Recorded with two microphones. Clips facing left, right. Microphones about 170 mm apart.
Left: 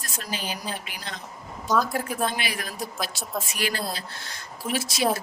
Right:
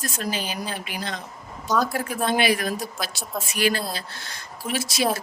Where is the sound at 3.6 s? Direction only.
75° right (ahead or behind).